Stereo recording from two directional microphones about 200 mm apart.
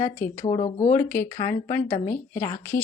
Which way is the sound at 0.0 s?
10° left (ahead or behind).